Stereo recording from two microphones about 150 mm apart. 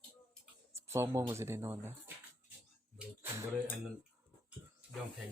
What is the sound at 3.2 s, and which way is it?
Speech, 20° right (ahead or behind).